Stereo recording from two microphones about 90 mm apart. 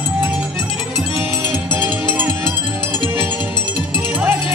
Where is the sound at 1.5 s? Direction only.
20° right (ahead or behind).